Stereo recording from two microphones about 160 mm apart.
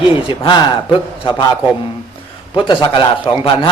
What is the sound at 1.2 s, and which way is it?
Speech, 30° left (ahead or behind).